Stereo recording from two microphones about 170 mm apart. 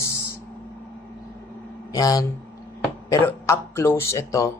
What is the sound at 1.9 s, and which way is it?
Speech, 20° left (ahead or behind).